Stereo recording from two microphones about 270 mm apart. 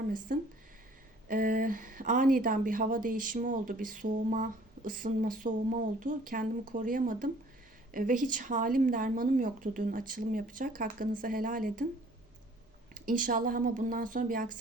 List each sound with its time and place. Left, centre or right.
0.3 s speech: right
12.9 s speech: right